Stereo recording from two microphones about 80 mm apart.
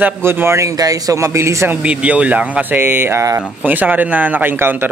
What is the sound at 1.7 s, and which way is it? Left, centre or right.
Speech, centre.